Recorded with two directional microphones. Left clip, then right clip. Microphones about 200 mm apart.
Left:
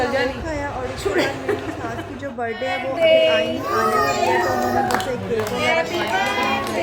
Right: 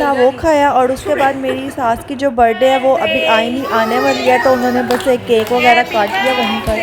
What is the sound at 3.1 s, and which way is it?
Speech, 20° right (ahead or behind).